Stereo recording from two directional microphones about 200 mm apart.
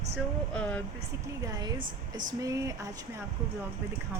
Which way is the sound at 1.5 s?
20° right (ahead or behind).